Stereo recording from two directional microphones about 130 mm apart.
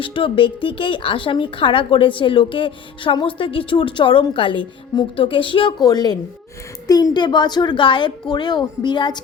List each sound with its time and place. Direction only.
0.0 s a woman's voice: 45° left (ahead or behind)